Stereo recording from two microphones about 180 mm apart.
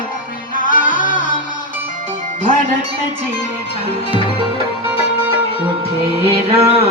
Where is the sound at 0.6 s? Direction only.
45° left (ahead or behind).